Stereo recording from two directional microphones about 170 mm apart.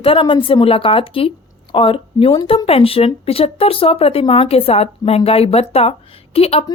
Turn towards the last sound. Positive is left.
turn(degrees=35)  # may be behind; listen again after turning